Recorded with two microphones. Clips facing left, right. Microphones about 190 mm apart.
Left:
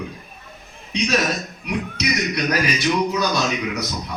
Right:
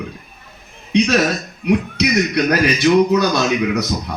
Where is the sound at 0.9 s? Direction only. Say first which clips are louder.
Right 6 dB; 65° right (ahead or behind).